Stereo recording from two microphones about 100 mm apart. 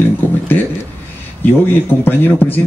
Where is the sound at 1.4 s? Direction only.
20° left (ahead or behind).